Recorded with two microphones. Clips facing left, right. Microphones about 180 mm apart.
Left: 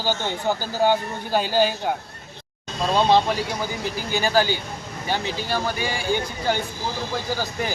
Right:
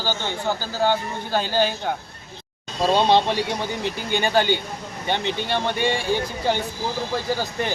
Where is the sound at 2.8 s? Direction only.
30° right (ahead or behind).